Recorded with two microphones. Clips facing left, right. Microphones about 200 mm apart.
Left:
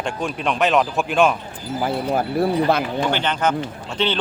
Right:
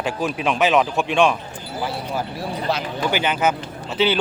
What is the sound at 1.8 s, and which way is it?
Speech, 50° left (ahead or behind).